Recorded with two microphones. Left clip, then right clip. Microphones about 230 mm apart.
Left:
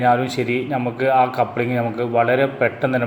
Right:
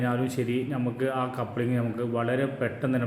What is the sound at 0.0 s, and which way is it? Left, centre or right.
A man's voice, centre.